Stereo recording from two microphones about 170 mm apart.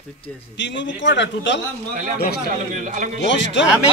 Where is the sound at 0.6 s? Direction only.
90° left.